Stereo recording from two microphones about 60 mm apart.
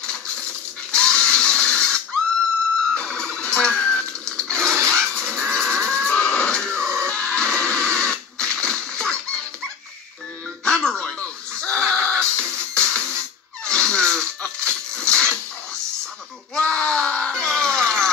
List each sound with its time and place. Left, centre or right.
0.9 s printer: centre
2.9 s music: centre
4.6 s a sound: right
4.9 s livestock: centre
7.0 s music: centre
10.6 s music: centre
13.7 s a sound: centre
16.5 s screaming: centre